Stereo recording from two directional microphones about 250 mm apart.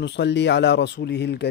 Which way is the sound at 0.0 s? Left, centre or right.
Left.